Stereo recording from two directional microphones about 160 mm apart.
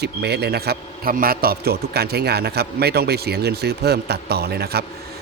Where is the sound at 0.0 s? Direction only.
90° right.